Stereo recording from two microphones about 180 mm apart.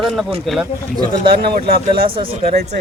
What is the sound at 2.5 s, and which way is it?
Speech, 65° right (ahead or behind).